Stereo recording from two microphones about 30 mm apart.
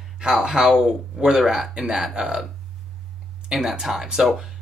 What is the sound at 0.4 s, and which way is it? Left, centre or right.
Speech, right.